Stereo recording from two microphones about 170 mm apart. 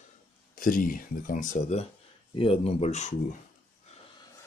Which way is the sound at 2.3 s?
30° left (ahead or behind).